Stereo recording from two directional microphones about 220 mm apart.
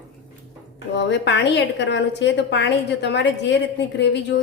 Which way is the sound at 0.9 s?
50° left (ahead or behind).